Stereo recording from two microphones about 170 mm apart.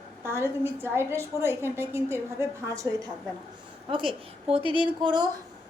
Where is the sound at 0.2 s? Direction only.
15° right (ahead or behind).